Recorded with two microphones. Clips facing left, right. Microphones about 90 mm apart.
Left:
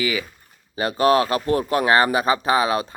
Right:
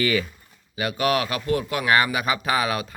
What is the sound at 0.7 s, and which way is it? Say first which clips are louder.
Speech: left 5 dB; 35° left (ahead or behind).